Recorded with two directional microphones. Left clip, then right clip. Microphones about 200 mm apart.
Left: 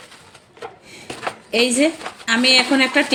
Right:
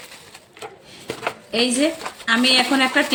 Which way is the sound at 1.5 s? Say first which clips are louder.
Left 3 dB; 10° left (ahead or behind).